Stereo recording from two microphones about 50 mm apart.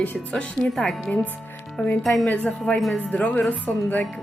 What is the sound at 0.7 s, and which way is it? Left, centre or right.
Speech, centre.